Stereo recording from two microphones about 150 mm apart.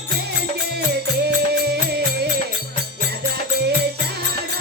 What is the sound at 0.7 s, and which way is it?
Music, 90° right.